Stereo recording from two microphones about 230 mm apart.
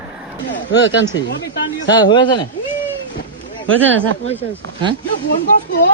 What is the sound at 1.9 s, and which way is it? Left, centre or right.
Speech, centre.